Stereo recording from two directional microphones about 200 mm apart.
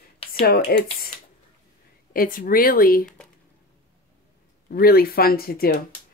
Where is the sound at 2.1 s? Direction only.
45° left (ahead or behind).